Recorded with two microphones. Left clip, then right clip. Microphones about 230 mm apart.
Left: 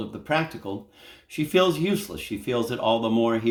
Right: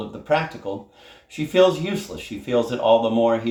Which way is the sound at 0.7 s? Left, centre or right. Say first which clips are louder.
Right 4 dB; left.